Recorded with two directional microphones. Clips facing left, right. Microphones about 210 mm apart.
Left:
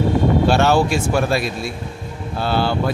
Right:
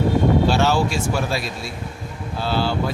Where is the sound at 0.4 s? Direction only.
60° left (ahead or behind).